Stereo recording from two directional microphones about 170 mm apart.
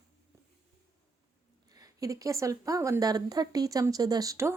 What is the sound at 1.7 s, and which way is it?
Speech, 20° right (ahead or behind).